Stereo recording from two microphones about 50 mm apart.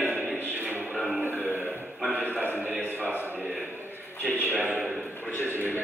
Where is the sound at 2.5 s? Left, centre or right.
Right.